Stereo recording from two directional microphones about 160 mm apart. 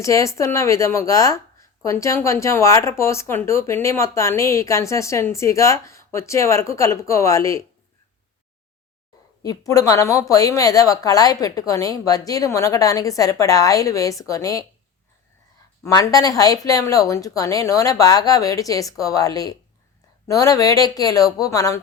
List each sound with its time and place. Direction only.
0.0 s a woman's voice: 20° left (ahead or behind)
9.4 s a woman's voice: 20° left (ahead or behind)
15.8 s a woman's voice: 20° left (ahead or behind)